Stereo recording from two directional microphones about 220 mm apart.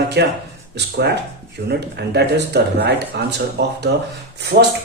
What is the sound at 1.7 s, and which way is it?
A man's voice, 50° right (ahead or behind).